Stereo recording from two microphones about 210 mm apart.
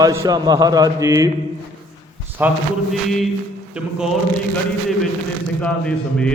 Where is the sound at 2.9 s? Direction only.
Centre (ahead or behind).